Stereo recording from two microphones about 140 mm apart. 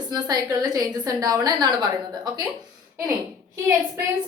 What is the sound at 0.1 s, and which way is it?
A woman's voice, 30° right (ahead or behind).